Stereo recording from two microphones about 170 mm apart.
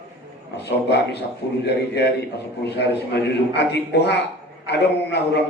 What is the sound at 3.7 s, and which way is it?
A man's voice, 75° left (ahead or behind).